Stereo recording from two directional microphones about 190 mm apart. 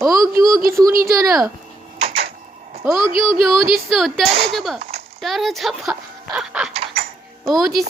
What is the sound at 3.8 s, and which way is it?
Speech, centre (ahead or behind).